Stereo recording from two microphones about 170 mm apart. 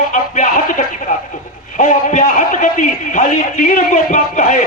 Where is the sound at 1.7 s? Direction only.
50° left (ahead or behind).